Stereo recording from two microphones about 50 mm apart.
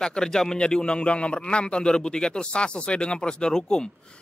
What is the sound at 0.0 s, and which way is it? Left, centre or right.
A man's voice, centre.